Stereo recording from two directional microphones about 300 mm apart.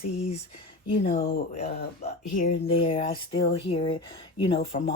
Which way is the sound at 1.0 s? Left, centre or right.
Left.